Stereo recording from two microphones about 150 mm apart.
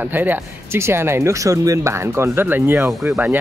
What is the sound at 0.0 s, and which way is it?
Speech, 10° right (ahead or behind).